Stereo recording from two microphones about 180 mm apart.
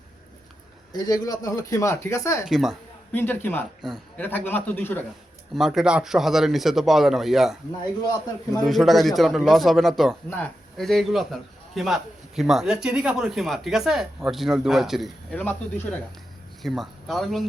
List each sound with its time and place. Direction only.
0.9 s speech: 20° left (ahead or behind)
2.5 s speech: centre (ahead or behind)
3.1 s a man's voice: 10° left (ahead or behind)
5.5 s speech: centre (ahead or behind)
8.6 s a man's voice: centre (ahead or behind)